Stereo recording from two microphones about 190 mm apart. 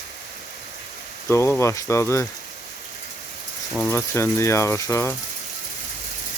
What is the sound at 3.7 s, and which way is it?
Speech, 10° left (ahead or behind).